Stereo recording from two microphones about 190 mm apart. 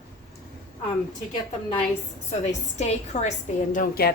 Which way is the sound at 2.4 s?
35° left (ahead or behind).